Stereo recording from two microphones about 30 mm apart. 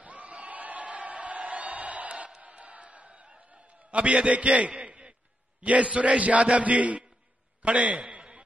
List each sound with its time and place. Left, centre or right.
0.0 s crowd: right
1.7 s a sound: right
2.4 s crowd: right
3.3 s a sound: right
4.3 s a man's voice: right
7.7 s a man's voice: right